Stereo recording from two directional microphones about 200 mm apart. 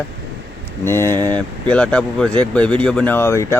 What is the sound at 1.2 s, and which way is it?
Speech, 20° right (ahead or behind).